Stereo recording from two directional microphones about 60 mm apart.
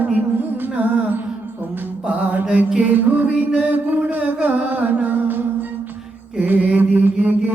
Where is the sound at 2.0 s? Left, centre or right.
Right.